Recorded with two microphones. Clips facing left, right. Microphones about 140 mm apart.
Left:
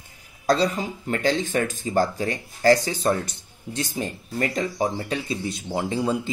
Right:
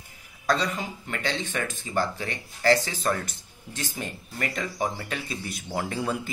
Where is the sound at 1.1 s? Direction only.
40° left (ahead or behind).